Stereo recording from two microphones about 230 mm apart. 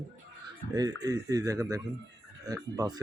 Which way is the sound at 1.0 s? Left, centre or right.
Centre.